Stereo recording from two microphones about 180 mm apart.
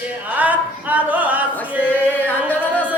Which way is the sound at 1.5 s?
10° left (ahead or behind).